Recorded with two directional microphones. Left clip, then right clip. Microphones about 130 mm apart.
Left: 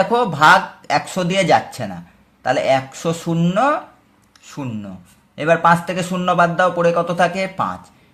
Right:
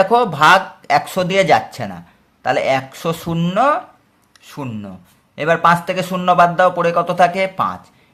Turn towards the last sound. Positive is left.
turn(degrees=-20)  # may be behind; listen again after turning